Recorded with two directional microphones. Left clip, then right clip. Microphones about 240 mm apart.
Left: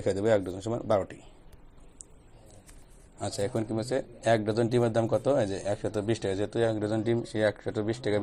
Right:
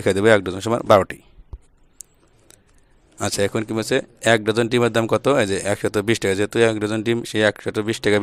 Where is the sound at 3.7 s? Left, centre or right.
Right.